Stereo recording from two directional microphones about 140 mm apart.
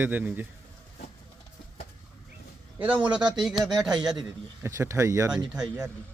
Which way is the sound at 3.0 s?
30° right (ahead or behind).